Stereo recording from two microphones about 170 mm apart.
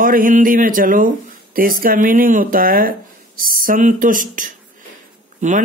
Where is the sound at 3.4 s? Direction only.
55° right (ahead or behind).